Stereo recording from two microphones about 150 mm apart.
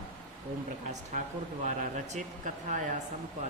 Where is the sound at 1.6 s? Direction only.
55° right (ahead or behind).